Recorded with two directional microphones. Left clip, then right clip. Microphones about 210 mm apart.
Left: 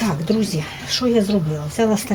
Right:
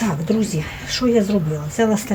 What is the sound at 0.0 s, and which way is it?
Speech, 25° left (ahead or behind).